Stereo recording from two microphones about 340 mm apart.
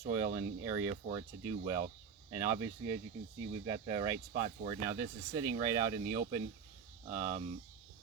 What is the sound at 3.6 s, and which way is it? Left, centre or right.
Speech, centre.